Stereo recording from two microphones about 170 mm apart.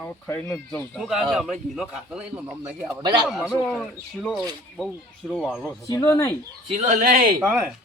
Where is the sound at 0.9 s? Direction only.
5° right (ahead or behind).